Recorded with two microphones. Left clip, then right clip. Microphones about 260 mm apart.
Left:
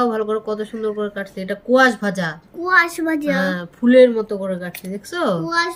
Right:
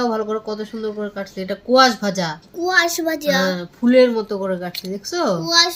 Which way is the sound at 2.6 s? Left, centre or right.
Centre.